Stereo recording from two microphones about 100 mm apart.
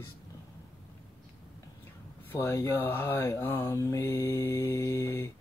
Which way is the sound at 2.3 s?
25° left (ahead or behind).